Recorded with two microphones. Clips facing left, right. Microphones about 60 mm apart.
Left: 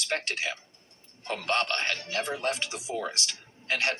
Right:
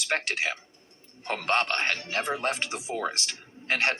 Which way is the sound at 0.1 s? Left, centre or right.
Right.